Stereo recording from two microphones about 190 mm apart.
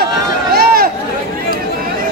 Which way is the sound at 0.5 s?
50° right (ahead or behind).